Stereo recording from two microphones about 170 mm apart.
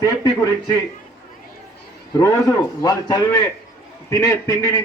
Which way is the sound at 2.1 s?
20° left (ahead or behind).